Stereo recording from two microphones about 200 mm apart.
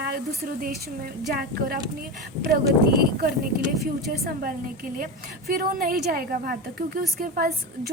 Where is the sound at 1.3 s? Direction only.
45° right (ahead or behind).